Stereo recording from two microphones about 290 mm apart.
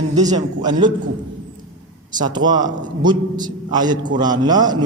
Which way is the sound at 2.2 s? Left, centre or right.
Centre.